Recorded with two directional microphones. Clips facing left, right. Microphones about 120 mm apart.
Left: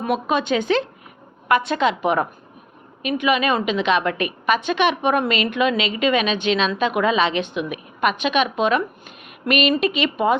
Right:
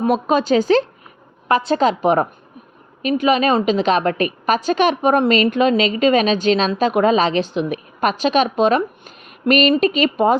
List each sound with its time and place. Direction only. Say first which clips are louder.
0.0 s a woman's voice: right 4 dB; 40° right (ahead or behind)